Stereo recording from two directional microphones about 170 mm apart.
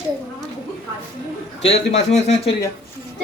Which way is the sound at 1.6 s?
40° left (ahead or behind).